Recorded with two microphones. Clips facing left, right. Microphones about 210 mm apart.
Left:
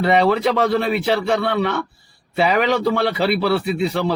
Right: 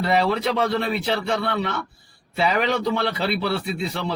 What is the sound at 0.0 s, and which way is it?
A man's voice, 65° left (ahead or behind).